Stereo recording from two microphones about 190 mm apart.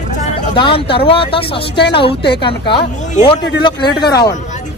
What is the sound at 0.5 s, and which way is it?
Speech, 25° left (ahead or behind).